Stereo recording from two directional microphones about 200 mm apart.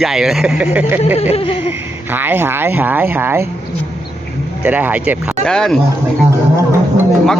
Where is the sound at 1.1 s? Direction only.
30° left (ahead or behind).